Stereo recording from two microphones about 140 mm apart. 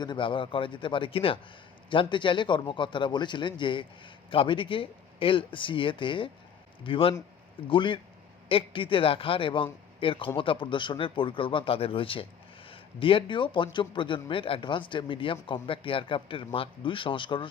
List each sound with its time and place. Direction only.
0.0 s a man's voice: 35° left (ahead or behind)